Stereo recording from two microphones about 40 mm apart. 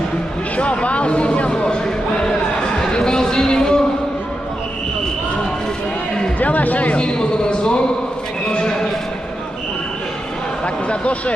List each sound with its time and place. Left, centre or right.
0.6 s speech: left
2.9 s a sound: centre
6.4 s speech: left
7.0 s a man's voice: left
10.9 s speech: left